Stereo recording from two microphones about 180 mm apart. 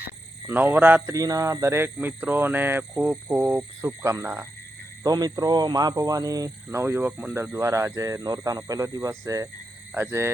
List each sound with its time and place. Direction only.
0.4 s speech: 10° right (ahead or behind)